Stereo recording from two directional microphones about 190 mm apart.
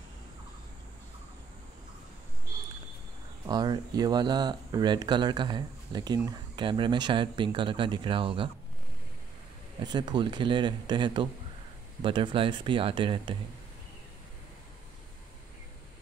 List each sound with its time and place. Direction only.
3.4 s speech: 20° right (ahead or behind)
9.8 s speech: 20° right (ahead or behind)